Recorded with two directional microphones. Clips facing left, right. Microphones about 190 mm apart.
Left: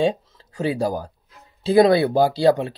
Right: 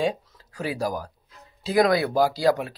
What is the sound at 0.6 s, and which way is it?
Speech, 25° left (ahead or behind).